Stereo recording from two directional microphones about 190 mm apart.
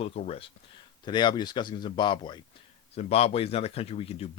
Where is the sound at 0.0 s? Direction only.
30° left (ahead or behind).